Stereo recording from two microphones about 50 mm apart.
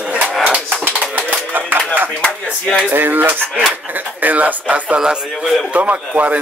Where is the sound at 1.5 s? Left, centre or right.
Right.